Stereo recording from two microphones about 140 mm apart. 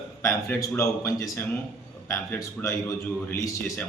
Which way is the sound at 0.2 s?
20° left (ahead or behind).